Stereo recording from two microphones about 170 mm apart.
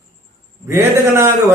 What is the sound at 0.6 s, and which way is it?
Speech, 15° right (ahead or behind).